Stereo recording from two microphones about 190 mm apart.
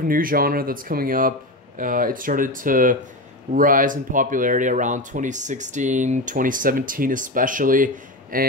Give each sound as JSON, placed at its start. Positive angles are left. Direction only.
{"t": 0.0, "sound": "speech", "side_deg": -50}